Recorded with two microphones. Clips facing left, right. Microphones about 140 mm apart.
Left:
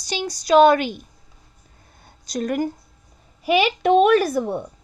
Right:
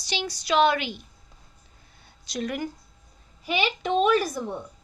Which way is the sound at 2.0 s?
45° left (ahead or behind).